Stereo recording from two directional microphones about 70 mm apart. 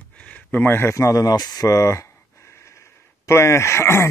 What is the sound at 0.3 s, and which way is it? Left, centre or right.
Speech, left.